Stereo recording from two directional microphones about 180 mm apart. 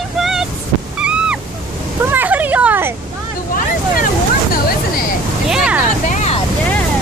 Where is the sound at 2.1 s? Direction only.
10° right (ahead or behind).